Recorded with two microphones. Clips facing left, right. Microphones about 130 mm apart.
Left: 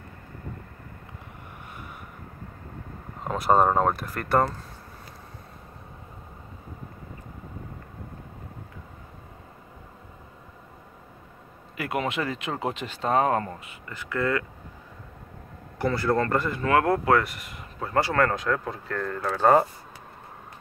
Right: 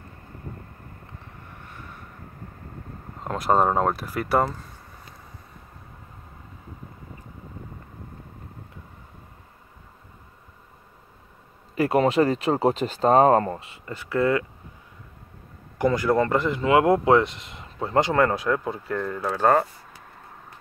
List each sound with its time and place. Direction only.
3.3 s speech: centre (ahead or behind)
11.7 s speech: 35° right (ahead or behind)
15.8 s speech: 15° right (ahead or behind)